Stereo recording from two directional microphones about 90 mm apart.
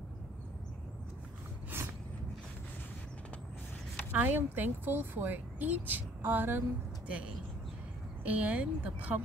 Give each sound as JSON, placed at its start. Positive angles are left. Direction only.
{"t": 1.7, "sound": "a sound", "side_deg": -25}
{"t": 4.1, "sound": "speech", "side_deg": -20}
{"t": 8.2, "sound": "speech", "side_deg": -15}